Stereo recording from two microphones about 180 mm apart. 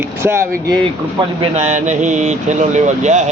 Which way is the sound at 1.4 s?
40° right (ahead or behind).